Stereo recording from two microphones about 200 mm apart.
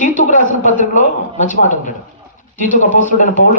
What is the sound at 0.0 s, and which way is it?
A woman's voice, 40° left (ahead or behind).